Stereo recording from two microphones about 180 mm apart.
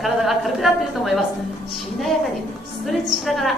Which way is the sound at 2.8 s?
Centre (ahead or behind).